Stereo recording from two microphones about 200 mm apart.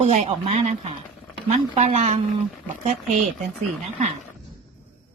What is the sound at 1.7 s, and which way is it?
Speech, 30° right (ahead or behind).